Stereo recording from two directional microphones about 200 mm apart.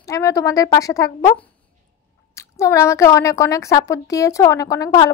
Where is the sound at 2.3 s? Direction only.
15° left (ahead or behind).